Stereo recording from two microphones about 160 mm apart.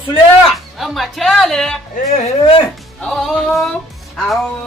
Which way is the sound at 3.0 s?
5° left (ahead or behind).